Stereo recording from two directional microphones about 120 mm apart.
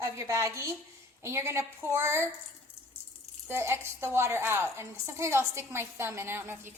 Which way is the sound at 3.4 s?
20° right (ahead or behind).